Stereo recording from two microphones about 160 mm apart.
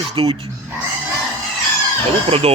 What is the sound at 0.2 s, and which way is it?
Speech, 35° right (ahead or behind).